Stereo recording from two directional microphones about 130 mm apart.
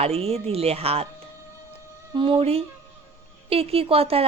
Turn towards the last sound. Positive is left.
turn(degrees=-50)  # may be behind; listen again after turning